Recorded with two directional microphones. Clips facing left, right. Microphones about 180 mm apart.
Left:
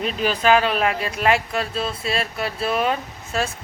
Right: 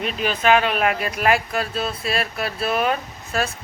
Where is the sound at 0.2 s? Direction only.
40° left (ahead or behind).